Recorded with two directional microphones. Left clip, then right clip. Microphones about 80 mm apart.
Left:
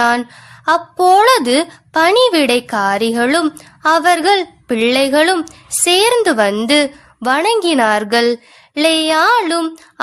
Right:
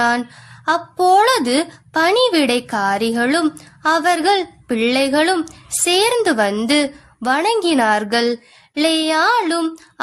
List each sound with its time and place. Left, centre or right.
0.0 s speech: left